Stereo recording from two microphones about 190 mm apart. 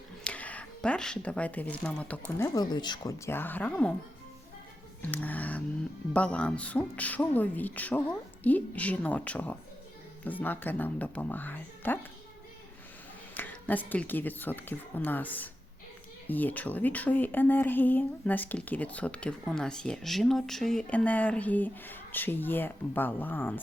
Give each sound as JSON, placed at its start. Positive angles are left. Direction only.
{"t": 0.3, "sound": "speech", "side_deg": 5}
{"t": 2.6, "sound": "speech", "side_deg": 20}
{"t": 5.0, "sound": "speech", "side_deg": 10}
{"t": 13.3, "sound": "speech", "side_deg": 10}